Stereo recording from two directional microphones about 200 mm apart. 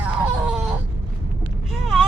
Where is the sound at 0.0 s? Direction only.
5° right (ahead or behind).